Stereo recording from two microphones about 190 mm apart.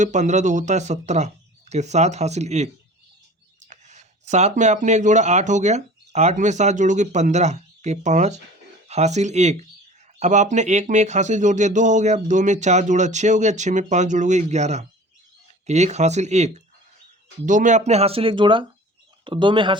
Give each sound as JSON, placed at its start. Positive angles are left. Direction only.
{"t": 0.0, "sound": "speech", "side_deg": -40}
{"t": 3.7, "sound": "speech", "side_deg": -40}